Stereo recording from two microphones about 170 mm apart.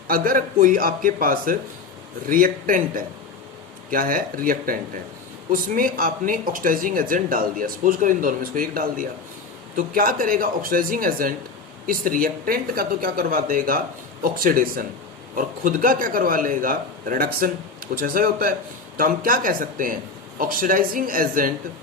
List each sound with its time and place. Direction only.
0.1 s speech: 55° right (ahead or behind)